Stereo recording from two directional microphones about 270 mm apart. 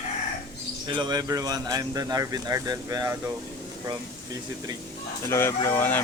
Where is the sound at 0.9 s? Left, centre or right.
Centre.